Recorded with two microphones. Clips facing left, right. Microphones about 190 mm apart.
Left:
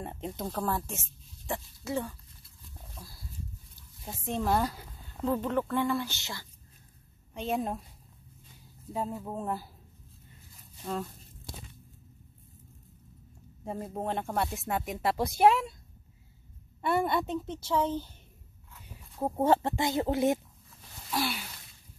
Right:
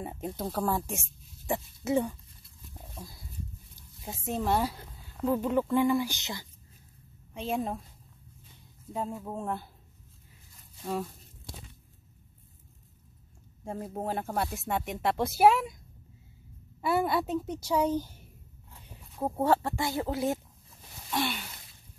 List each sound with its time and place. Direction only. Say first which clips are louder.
0.0 s speech: right 1 dB; 5° right (ahead or behind)
2.7 s dog: right 4 dB; 20° right (ahead or behind)
4.0 s speech: even; 10° right (ahead or behind)
7.3 s speech: even; centre (ahead or behind)
8.9 s speech: even; centre (ahead or behind)
13.7 s speech: even; centre (ahead or behind)
16.8 s speech: right 1 dB; 5° right (ahead or behind)
19.1 s speech: even; centre (ahead or behind)
19.4 s speech: left 1 dB; 20° left (ahead or behind)
21.1 s speech: right 1 dB; 5° left (ahead or behind)